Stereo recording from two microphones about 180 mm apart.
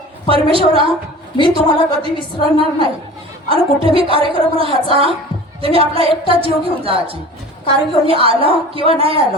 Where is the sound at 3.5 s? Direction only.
30° right (ahead or behind).